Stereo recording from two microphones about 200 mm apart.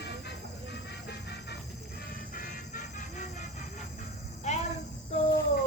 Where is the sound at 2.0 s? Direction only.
45° left (ahead or behind).